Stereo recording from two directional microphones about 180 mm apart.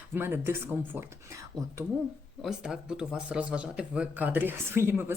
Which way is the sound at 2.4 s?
5° right (ahead or behind).